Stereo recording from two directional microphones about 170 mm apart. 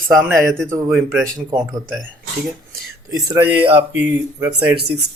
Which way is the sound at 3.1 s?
20° right (ahead or behind).